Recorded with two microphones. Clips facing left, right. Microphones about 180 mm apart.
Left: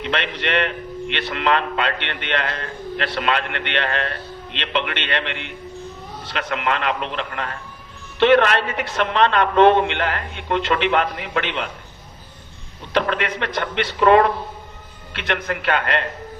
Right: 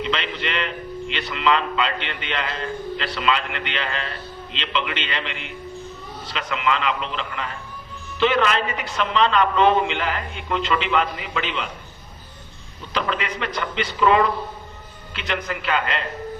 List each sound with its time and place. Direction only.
0.0 s a man's voice: 60° left (ahead or behind)
12.9 s a man's voice: 60° left (ahead or behind)